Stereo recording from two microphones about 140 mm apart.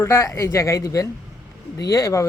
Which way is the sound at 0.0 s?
20° left (ahead or behind).